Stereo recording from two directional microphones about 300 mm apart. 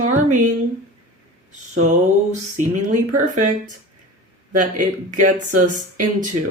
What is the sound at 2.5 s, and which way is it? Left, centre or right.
Speech, right.